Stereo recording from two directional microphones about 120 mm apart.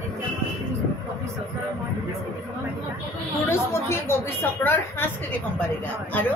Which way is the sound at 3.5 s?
20° left (ahead or behind).